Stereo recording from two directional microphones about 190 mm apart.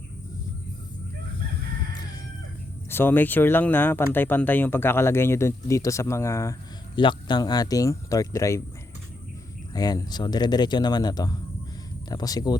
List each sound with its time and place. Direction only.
2.9 s speech: 10° left (ahead or behind)
9.7 s speech: 20° left (ahead or behind)